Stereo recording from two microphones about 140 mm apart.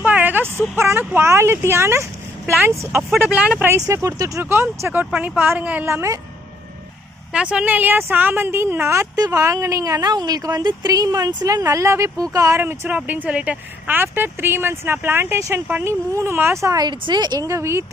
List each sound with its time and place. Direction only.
0.0 s a sound: 10° right (ahead or behind)
0.8 s a woman's voice: 15° right (ahead or behind)
3.1 s speech: centre (ahead or behind)
3.8 s a woman's voice: 20° right (ahead or behind)
7.3 s a woman's voice: 5° right (ahead or behind)